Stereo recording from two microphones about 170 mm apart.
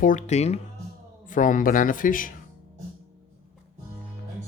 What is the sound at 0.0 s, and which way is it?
Speech, 45° left (ahead or behind).